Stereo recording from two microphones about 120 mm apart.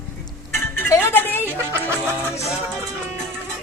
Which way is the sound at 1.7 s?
20° right (ahead or behind).